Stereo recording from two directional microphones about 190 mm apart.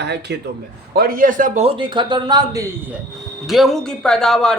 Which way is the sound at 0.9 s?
50° right (ahead or behind).